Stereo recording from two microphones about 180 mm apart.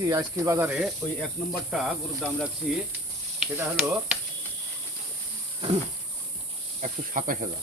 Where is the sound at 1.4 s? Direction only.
Centre (ahead or behind).